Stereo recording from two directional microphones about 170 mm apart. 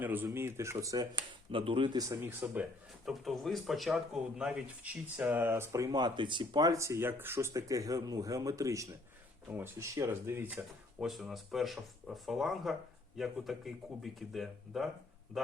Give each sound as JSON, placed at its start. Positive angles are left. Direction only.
{"t": 0.0, "sound": "speech", "side_deg": -10}
{"t": 1.5, "sound": "speech", "side_deg": -30}
{"t": 3.1, "sound": "speech", "side_deg": 0}
{"t": 11.0, "sound": "speech", "side_deg": 0}